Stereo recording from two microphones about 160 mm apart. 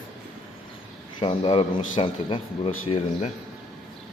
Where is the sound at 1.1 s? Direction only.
35° left (ahead or behind).